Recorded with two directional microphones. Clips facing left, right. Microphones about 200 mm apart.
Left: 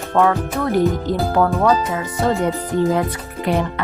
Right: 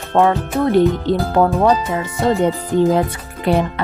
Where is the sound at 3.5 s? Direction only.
30° right (ahead or behind).